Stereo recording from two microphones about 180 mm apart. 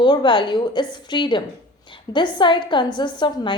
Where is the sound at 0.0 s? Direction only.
25° left (ahead or behind).